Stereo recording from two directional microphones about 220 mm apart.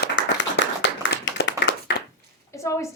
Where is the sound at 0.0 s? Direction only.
55° left (ahead or behind).